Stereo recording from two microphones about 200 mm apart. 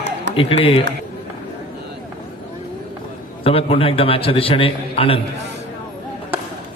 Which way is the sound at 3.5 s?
30° left (ahead or behind).